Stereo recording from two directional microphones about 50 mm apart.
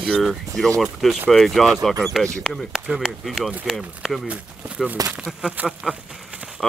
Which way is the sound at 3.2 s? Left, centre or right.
Centre.